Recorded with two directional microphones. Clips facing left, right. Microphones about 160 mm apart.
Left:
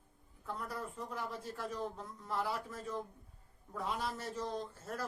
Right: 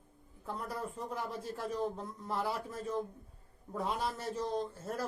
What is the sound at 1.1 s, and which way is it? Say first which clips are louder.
Speech: right 3 dB; 20° right (ahead or behind).